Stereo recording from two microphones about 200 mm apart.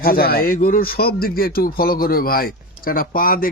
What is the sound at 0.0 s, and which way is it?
Speech, 50° left (ahead or behind).